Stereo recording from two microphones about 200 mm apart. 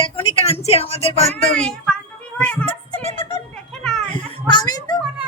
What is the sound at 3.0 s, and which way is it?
A child's voice, 25° left (ahead or behind).